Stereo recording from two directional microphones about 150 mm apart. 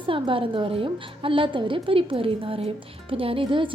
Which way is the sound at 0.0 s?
35° right (ahead or behind).